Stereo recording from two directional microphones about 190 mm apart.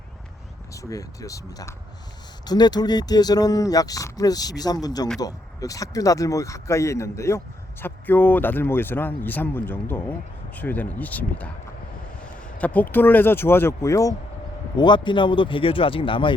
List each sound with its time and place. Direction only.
0.7 s speech: 15° left (ahead or behind)